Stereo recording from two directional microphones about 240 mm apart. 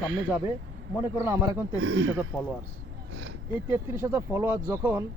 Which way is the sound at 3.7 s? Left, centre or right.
Centre.